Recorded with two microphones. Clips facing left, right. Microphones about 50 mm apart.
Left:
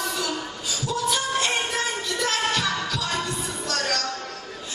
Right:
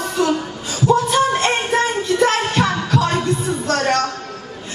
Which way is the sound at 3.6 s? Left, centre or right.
Right.